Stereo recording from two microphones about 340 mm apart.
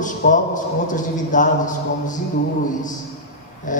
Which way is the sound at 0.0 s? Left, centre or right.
Left.